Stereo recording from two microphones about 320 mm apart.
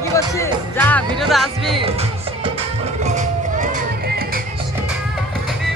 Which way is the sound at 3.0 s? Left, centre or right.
Right.